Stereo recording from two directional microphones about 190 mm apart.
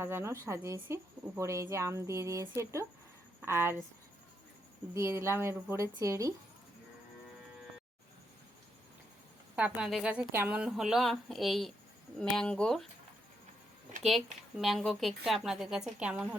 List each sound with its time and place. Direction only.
0.0 s speech: 10° right (ahead or behind)
4.9 s speech: 15° right (ahead or behind)
9.6 s a woman's voice: 5° right (ahead or behind)
14.0 s a woman's voice: centre (ahead or behind)